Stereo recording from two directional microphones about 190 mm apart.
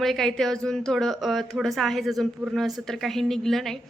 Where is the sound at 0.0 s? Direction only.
Centre (ahead or behind).